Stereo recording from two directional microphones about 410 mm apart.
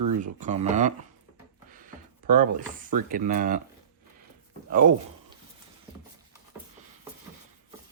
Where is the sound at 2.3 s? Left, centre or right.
Centre.